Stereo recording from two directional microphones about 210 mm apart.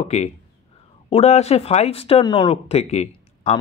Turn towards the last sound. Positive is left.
turn(degrees=30)  # may be behind; listen again after turning